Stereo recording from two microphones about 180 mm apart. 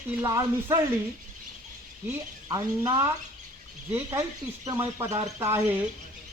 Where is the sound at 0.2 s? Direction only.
15° right (ahead or behind).